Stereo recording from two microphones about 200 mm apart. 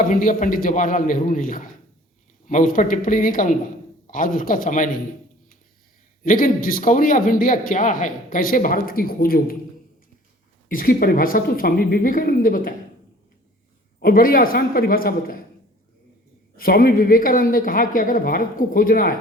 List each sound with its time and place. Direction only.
0.0 s a man's voice: 45° left (ahead or behind)
6.2 s a man's voice: 45° left (ahead or behind)
10.7 s a man's voice: 45° left (ahead or behind)
14.0 s a man's voice: 45° left (ahead or behind)
16.6 s a man's voice: 45° left (ahead or behind)